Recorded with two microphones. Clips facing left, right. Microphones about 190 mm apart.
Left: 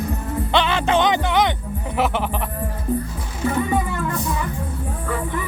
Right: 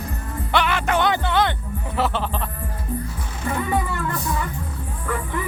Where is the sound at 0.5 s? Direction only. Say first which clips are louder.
Left 2 dB; 25° left (ahead or behind).